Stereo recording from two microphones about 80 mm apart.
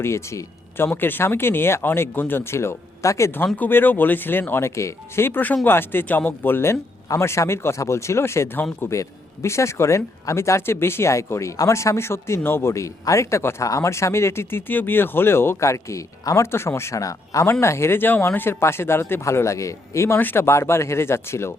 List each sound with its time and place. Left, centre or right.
0.0 s a man's voice: left
0.9 s speech: left
3.3 s speech: left
17.4 s speech: left
20.1 s speech: left